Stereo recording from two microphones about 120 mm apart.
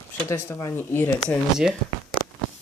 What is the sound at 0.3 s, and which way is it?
Speech, 25° left (ahead or behind).